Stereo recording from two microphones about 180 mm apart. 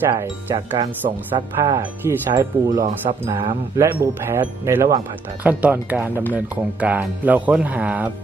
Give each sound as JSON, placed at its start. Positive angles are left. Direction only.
{"t": 0.1, "sound": "speech", "side_deg": -25}